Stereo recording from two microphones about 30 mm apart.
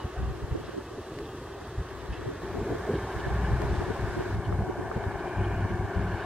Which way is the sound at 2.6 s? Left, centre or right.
Centre.